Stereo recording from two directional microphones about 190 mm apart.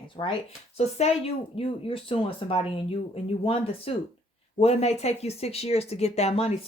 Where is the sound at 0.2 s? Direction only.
30° left (ahead or behind).